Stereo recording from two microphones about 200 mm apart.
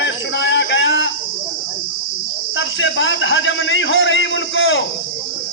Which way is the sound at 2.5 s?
70° left (ahead or behind).